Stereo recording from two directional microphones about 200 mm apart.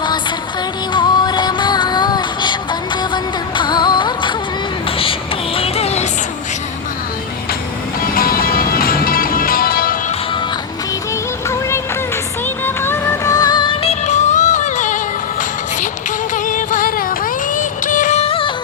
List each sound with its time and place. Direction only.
0.0 s music: 20° left (ahead or behind)
4.9 s a sound: 25° left (ahead or behind)
5.5 s music: 30° left (ahead or behind)
8.1 s music: 45° left (ahead or behind)
12.6 s music: 10° left (ahead or behind); by 18.5 s 25° left (ahead or behind)